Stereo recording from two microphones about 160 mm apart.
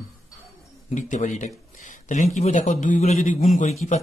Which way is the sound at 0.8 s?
50° left (ahead or behind).